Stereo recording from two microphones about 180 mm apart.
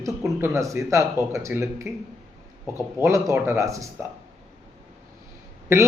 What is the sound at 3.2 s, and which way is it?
Speech, 15° right (ahead or behind).